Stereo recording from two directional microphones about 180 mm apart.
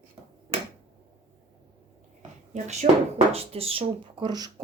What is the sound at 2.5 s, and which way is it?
Speech, 40° right (ahead or behind).